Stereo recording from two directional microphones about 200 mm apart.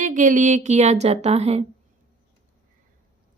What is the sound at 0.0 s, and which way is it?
Speech, 40° right (ahead or behind).